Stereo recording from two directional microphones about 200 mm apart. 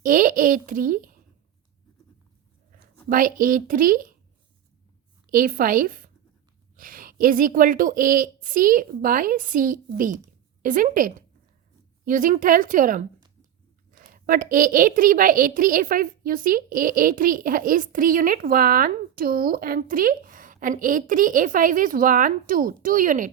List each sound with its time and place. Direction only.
0.0 s a child's voice: 45° right (ahead or behind)
3.1 s a woman's voice: 45° right (ahead or behind)
5.3 s a woman's voice: 45° right (ahead or behind)
14.1 s a woman's voice: 45° right (ahead or behind)